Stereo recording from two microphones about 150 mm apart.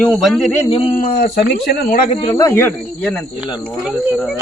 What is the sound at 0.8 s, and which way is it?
Speech, 65° left (ahead or behind).